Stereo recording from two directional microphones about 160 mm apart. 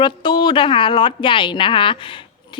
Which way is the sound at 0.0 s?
30° left (ahead or behind).